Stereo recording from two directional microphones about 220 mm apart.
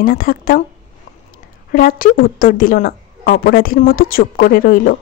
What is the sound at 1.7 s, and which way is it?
Speech, 40° left (ahead or behind).